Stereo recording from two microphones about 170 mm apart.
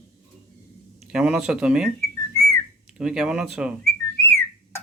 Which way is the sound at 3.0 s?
5° right (ahead or behind).